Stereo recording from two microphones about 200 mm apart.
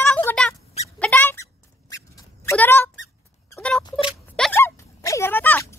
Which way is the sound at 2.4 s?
10° left (ahead or behind).